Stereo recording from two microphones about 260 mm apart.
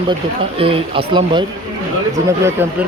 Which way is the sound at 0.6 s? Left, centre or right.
Right.